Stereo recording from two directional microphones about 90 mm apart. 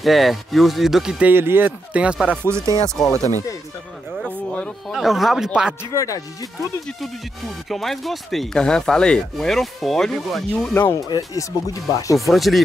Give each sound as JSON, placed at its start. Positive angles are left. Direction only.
{"t": 0.0, "sound": "speech", "side_deg": 0}
{"t": 1.2, "sound": "speech", "side_deg": -25}
{"t": 2.0, "sound": "chopping", "side_deg": -10}
{"t": 2.4, "sound": "speech", "side_deg": -35}
{"t": 3.1, "sound": "speech", "side_deg": 35}
{"t": 4.9, "sound": "speech", "side_deg": -5}
{"t": 5.9, "sound": "speech", "side_deg": 40}
{"t": 7.7, "sound": "speech", "side_deg": 0}
{"t": 10.7, "sound": "speech", "side_deg": 25}
{"t": 11.1, "sound": "speech", "side_deg": 45}
{"t": 12.3, "sound": "speech", "side_deg": 0}